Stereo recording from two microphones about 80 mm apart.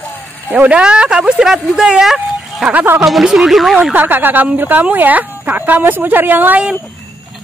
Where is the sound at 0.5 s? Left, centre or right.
Centre.